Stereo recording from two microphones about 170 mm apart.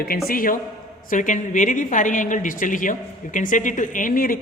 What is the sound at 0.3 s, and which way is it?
A man's voice, 55° left (ahead or behind).